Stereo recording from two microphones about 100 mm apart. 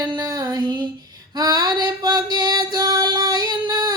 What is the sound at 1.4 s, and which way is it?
Music, 45° right (ahead or behind).